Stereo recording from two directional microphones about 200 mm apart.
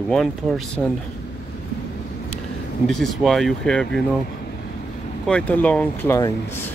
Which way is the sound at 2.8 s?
Centre (ahead or behind).